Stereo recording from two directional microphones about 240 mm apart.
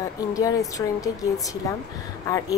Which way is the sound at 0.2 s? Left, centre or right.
Centre.